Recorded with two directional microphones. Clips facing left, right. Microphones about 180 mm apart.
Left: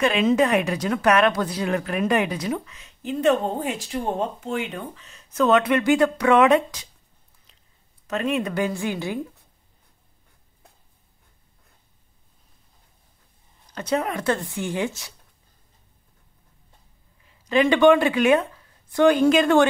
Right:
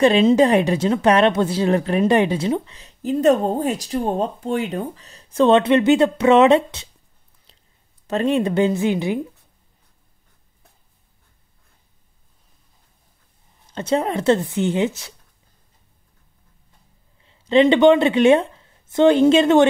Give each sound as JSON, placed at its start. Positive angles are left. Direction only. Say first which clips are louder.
{"t": 0.0, "sound": "speech", "louder": "right 6 dB", "side_deg": -30}
{"t": 8.1, "sound": "speech", "louder": "right 5 dB", "side_deg": -30}
{"t": 13.7, "sound": "speech", "louder": "right 4 dB", "side_deg": -30}
{"t": 17.2, "sound": "speech", "louder": "right 5 dB", "side_deg": -25}